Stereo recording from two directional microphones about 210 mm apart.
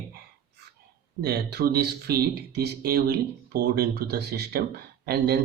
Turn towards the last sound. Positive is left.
turn(degrees=-50)  # may be behind; listen again after turning